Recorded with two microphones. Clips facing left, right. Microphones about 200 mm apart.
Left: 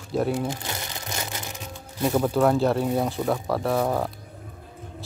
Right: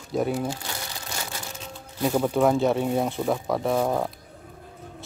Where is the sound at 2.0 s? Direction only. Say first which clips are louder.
Even; 5° right (ahead or behind).